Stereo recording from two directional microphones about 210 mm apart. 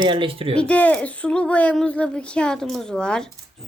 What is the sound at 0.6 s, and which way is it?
Speech, 5° left (ahead or behind).